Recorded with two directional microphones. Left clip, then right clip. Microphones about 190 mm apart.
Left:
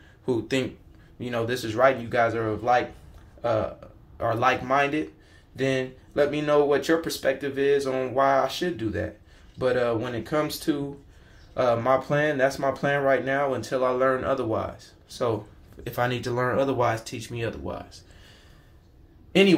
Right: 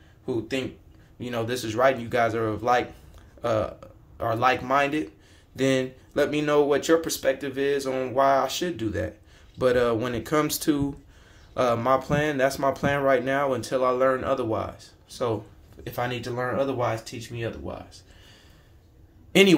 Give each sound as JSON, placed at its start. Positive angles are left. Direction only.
{"t": 0.3, "sound": "speech", "side_deg": 25}
{"t": 1.2, "sound": "speech", "side_deg": 5}
{"t": 5.6, "sound": "speech", "side_deg": -15}
{"t": 11.5, "sound": "speech", "side_deg": -10}
{"t": 15.8, "sound": "speech", "side_deg": 15}